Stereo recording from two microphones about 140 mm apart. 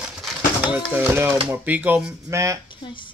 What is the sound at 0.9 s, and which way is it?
Speech, 15° right (ahead or behind).